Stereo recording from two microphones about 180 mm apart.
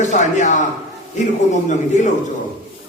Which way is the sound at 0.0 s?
40° left (ahead or behind).